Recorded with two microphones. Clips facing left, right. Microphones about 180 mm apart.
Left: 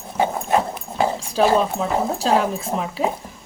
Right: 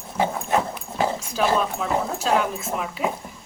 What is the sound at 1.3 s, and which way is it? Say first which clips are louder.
Speech: left 6 dB; 35° left (ahead or behind).